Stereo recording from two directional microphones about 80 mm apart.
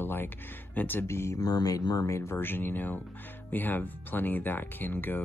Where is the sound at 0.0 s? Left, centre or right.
Left.